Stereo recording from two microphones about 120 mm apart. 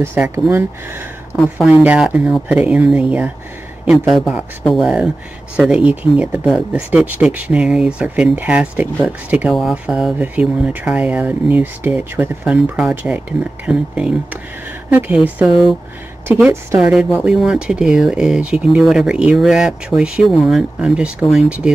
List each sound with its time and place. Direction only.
0.0 s speech: 20° right (ahead or behind)
3.8 s speech: centre (ahead or behind)